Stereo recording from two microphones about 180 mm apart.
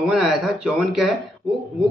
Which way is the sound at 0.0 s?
Centre (ahead or behind).